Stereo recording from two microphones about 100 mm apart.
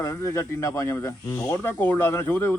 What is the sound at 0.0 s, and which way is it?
Speech, 30° left (ahead or behind).